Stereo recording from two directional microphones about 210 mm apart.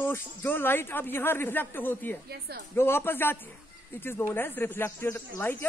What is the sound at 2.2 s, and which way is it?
Speech, 50° right (ahead or behind).